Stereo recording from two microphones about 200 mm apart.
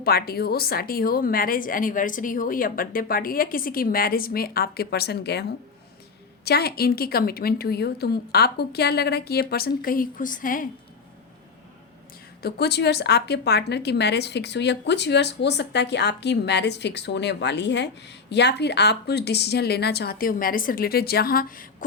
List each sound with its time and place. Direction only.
0.0 s a woman's voice: 50° left (ahead or behind)
12.4 s a woman's voice: 55° left (ahead or behind)